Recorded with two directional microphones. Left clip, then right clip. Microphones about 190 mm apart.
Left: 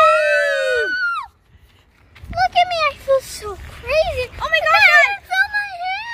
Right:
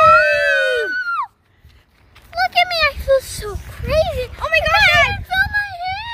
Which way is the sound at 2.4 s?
10° right (ahead or behind).